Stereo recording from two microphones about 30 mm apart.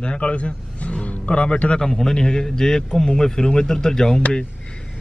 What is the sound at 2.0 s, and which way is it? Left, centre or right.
A man's voice, centre.